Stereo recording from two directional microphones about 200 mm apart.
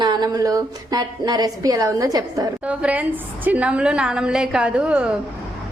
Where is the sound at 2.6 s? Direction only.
5° right (ahead or behind).